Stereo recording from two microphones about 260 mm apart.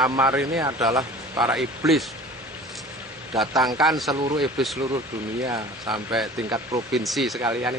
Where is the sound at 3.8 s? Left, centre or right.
Centre.